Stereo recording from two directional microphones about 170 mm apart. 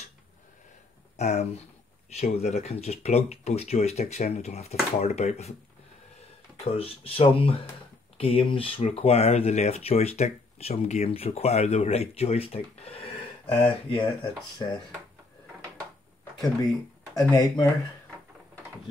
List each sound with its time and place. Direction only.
1.1 s speech: 40° left (ahead or behind)
6.6 s speech: 35° left (ahead or behind)
17.1 s speech: 20° left (ahead or behind)